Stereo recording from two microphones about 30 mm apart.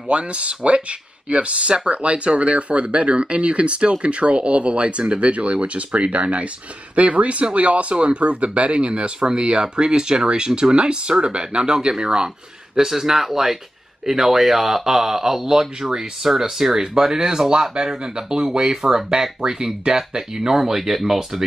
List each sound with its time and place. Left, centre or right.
0.1 s speech: right
12.7 s speech: centre
18.6 s speech: centre